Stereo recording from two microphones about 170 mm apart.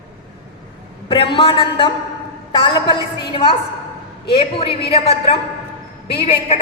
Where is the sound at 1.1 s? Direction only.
30° left (ahead or behind).